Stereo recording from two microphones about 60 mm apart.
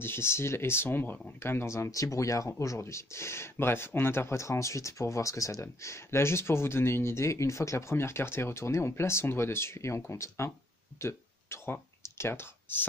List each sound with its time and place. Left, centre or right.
0.0 s speech: left
1.9 s speech: left
11.0 s a sound: left
12.2 s speech: left